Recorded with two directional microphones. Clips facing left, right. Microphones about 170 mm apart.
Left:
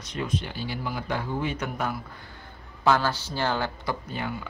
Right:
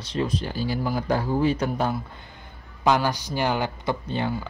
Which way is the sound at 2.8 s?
15° right (ahead or behind).